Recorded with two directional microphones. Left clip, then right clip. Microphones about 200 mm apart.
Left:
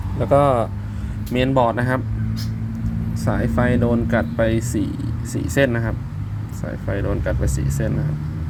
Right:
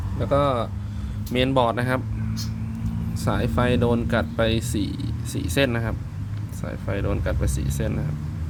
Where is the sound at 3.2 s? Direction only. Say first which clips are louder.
Left 2 dB; 25° right (ahead or behind).